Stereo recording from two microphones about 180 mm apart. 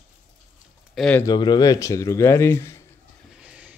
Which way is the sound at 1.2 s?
25° left (ahead or behind).